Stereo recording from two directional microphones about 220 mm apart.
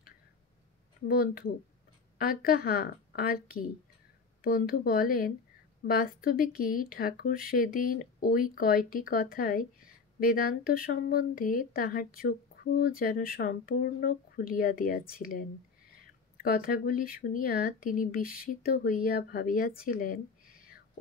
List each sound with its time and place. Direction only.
1.0 s a woman's voice: 40° left (ahead or behind)
16.4 s speech: 40° left (ahead or behind)
19.8 s a sound: 40° left (ahead or behind)